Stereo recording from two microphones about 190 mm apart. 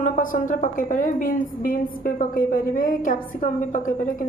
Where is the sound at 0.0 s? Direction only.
45° left (ahead or behind).